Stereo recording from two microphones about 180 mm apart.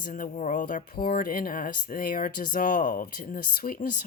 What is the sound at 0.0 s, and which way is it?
Speech, 50° left (ahead or behind).